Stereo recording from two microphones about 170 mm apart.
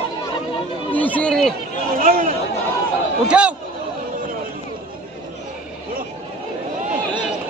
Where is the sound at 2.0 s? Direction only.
55° right (ahead or behind).